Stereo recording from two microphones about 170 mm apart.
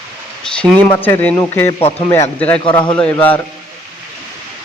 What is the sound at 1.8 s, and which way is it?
Speech, 35° left (ahead or behind).